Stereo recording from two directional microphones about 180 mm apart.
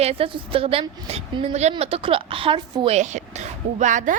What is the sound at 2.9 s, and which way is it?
A woman's voice, 40° right (ahead or behind).